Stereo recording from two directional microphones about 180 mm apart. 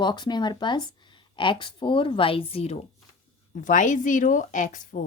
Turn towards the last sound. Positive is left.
turn(degrees=45)  # may be behind; listen again after turning